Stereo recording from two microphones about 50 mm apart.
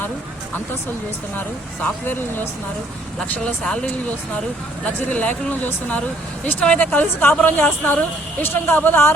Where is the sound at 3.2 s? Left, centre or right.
Centre.